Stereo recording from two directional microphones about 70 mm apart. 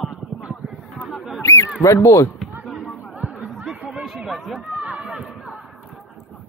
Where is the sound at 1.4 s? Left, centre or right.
Left.